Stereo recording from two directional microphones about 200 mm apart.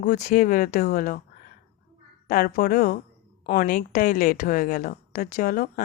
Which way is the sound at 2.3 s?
45° left (ahead or behind).